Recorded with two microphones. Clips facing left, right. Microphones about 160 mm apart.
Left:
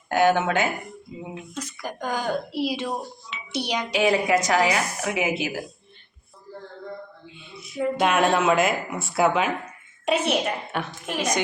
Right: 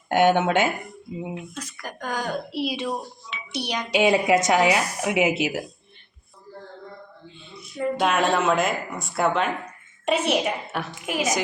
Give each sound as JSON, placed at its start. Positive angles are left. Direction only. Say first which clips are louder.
{"t": 0.1, "sound": "a woman's voice", "louder": "right 1 dB", "side_deg": -25}
{"t": 1.5, "sound": "speech", "louder": "left 3 dB", "side_deg": 10}
{"t": 3.9, "sound": "a woman's voice", "louder": "right 2 dB", "side_deg": -25}
{"t": 7.5, "sound": "speech", "louder": "left 1 dB", "side_deg": 0}